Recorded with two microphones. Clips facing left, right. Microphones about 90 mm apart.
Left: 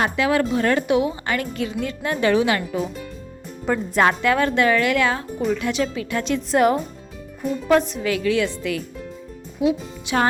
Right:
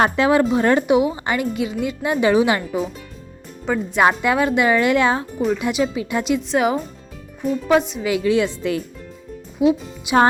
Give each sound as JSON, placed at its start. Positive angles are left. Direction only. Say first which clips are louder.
{"t": 0.0, "sound": "a woman's voice", "louder": "right 4 dB", "side_deg": -30}
{"t": 3.7, "sound": "speech", "louder": "right 1 dB", "side_deg": 0}
{"t": 4.2, "sound": "speech", "louder": "right 1 dB", "side_deg": -15}
{"t": 6.5, "sound": "speech", "louder": "left 5 dB", "side_deg": 0}
{"t": 8.0, "sound": "a woman's voice", "louder": "right 2 dB", "side_deg": -20}